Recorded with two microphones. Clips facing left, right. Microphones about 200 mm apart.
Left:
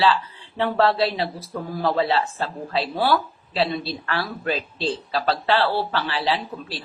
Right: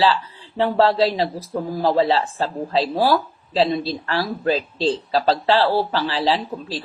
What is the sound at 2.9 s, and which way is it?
Speech, 40° right (ahead or behind).